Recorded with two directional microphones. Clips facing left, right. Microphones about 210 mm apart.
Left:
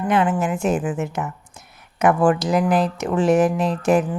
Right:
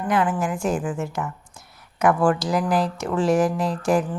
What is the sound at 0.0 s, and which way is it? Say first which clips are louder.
Speech: left 3 dB; 25° left (ahead or behind).